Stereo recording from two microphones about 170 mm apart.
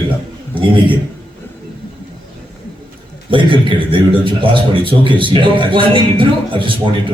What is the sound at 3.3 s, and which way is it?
A man's voice, 30° right (ahead or behind).